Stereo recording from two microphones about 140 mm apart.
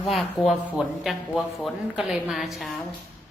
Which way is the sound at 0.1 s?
Centre (ahead or behind).